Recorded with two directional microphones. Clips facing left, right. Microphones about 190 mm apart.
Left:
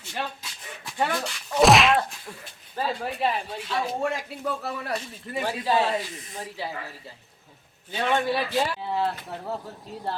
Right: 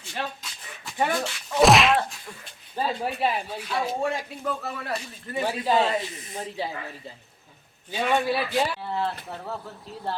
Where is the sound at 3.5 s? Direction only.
5° right (ahead or behind).